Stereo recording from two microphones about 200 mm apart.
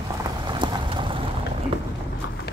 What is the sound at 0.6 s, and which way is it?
Boat, 25° right (ahead or behind).